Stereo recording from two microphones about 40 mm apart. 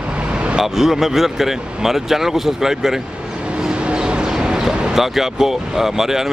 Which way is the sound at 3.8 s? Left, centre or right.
Right.